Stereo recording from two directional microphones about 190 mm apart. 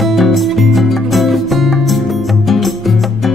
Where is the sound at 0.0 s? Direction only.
Centre (ahead or behind).